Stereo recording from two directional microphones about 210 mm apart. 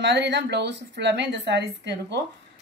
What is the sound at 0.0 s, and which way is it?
A woman's voice, 55° right (ahead or behind).